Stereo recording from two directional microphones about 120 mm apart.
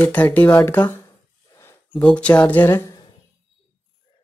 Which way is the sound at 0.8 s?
30° left (ahead or behind).